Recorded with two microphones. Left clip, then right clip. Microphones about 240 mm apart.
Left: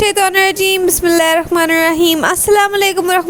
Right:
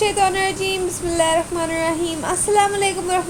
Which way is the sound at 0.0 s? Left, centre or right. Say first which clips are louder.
Left 6 dB; left.